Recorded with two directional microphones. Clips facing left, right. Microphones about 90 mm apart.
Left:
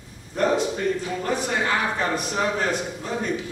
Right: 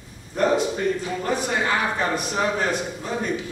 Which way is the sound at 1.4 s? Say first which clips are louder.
Right 1 dB; 10° right (ahead or behind).